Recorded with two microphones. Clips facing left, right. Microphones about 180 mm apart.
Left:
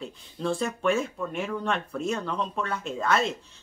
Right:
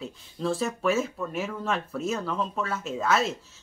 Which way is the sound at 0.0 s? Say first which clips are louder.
Right 1 dB; centre (ahead or behind).